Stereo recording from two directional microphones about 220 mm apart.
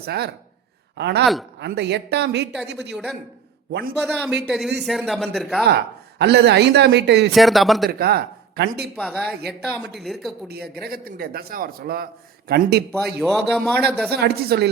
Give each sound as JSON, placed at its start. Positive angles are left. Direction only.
{"t": 0.0, "sound": "speech", "side_deg": -45}
{"t": 1.2, "sound": "speech", "side_deg": 0}
{"t": 1.5, "sound": "speech", "side_deg": -50}
{"t": 2.9, "sound": "speech", "side_deg": 0}
{"t": 3.7, "sound": "a man's voice", "side_deg": -45}
{"t": 4.0, "sound": "speech", "side_deg": 5}
{"t": 5.6, "sound": "speech", "side_deg": -50}
{"t": 7.3, "sound": "speech", "side_deg": 0}
{"t": 7.9, "sound": "speech", "side_deg": -45}
{"t": 9.0, "sound": "speech", "side_deg": 0}
{"t": 10.5, "sound": "speech", "side_deg": -45}
{"t": 13.1, "sound": "speech", "side_deg": 0}
{"t": 14.1, "sound": "speech", "side_deg": -45}